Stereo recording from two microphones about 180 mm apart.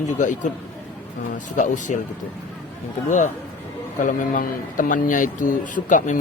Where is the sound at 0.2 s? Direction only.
45° left (ahead or behind).